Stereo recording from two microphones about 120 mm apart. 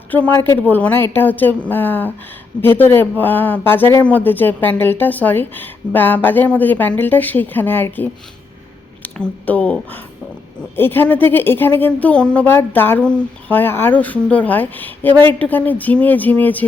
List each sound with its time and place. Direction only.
0.1 s speech: 15° left (ahead or behind)
9.1 s speech: 10° left (ahead or behind)